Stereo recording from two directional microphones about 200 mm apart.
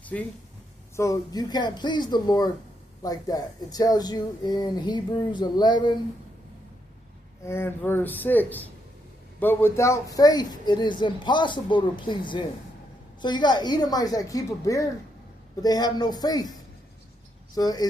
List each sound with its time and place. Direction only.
0.0 s speech: 5° left (ahead or behind); by 5.9 s 20° left (ahead or behind)
7.4 s speech: 10° left (ahead or behind)